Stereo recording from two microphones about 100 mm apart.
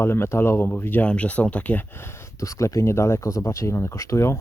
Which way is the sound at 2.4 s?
30° left (ahead or behind).